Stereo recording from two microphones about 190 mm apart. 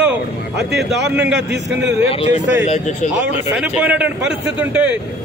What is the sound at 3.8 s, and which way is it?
A man's voice, 5° right (ahead or behind).